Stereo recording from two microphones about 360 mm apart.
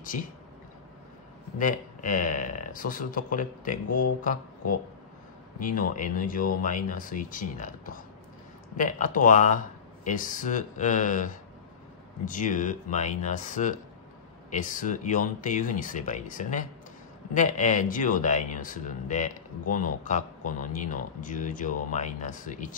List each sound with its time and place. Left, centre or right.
1.6 s speech: left